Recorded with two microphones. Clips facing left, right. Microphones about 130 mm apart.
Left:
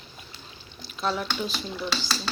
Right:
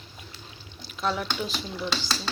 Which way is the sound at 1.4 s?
15° right (ahead or behind).